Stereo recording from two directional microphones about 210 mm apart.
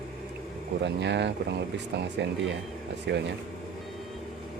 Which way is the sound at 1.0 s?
55° right (ahead or behind).